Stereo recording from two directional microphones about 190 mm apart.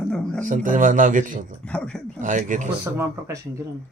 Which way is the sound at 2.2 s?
40° right (ahead or behind).